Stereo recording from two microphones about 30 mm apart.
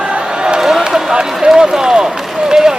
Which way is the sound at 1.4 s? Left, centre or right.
Right.